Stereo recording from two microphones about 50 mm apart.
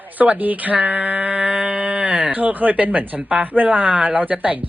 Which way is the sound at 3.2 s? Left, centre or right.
Right.